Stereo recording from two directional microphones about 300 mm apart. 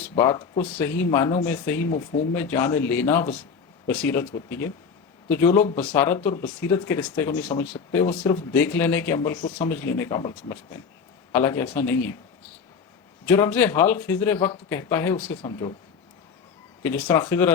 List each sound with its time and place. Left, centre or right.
0.0 s speech: centre
13.2 s speech: centre
16.8 s speech: centre